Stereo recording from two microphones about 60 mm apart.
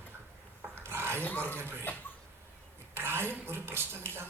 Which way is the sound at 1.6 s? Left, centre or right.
Right.